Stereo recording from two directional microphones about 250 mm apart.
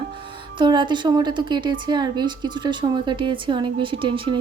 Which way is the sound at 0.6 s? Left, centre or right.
Centre.